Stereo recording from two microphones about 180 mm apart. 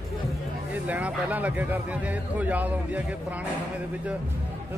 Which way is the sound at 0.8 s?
10° right (ahead or behind).